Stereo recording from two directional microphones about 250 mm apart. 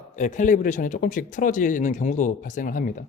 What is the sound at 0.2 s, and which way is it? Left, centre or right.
Speech, left.